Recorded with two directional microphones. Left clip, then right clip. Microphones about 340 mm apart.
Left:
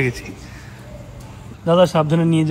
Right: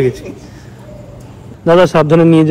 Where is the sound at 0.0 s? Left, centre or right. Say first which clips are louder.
Right 7 dB; centre.